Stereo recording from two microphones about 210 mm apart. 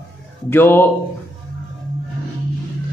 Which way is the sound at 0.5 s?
10° left (ahead or behind).